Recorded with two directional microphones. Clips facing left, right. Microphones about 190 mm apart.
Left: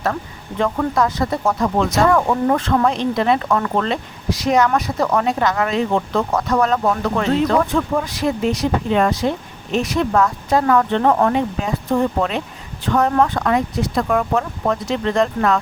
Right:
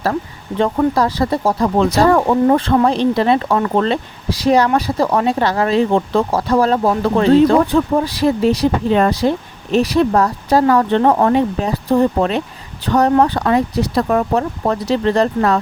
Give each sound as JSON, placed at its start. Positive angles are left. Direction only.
{"t": 0.6, "sound": "speech", "side_deg": -30}